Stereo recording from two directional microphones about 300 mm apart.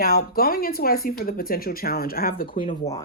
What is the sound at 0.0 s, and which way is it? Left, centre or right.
Speech, left.